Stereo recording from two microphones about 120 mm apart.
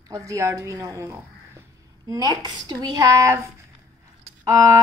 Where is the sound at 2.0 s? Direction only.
35° right (ahead or behind).